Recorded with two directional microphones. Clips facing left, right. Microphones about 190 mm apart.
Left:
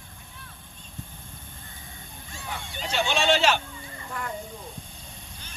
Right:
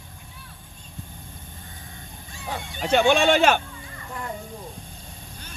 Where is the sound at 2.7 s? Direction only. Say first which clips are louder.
Right 8 dB; 55° right (ahead or behind).